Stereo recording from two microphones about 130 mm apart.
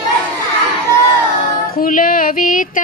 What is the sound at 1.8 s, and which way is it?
Female singing, 90° left.